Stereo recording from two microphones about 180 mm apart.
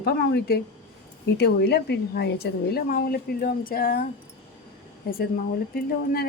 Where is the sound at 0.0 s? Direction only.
60° left (ahead or behind).